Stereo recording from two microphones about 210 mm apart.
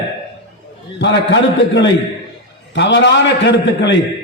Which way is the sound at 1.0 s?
55° left (ahead or behind).